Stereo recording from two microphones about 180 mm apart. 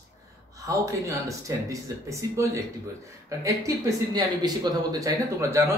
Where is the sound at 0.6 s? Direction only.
15° right (ahead or behind).